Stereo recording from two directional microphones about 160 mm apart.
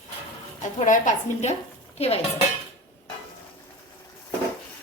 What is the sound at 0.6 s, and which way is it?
Speech, 55° left (ahead or behind).